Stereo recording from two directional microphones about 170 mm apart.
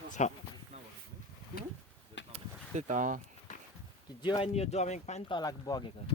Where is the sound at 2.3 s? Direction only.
45° right (ahead or behind).